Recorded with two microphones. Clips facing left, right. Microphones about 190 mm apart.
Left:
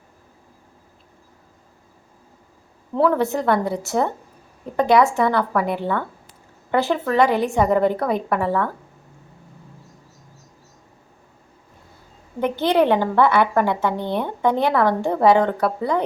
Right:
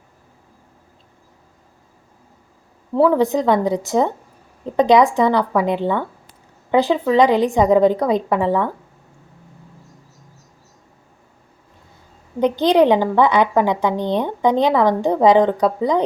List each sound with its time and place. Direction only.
2.9 s a woman's voice: 10° right (ahead or behind)
12.4 s a woman's voice: 15° right (ahead or behind)